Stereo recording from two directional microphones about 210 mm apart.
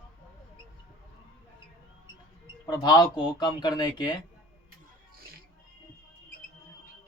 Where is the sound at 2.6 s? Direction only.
20° left (ahead or behind).